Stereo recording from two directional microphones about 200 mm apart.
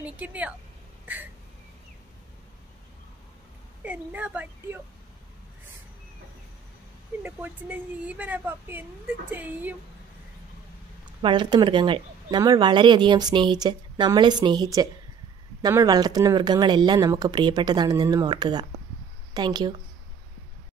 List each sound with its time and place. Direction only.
0.0 s a woman's voice: 5° right (ahead or behind)
3.8 s a woman's voice: 10° right (ahead or behind)
7.2 s a woman's voice: 10° right (ahead or behind)
11.1 s speech: 25° right (ahead or behind)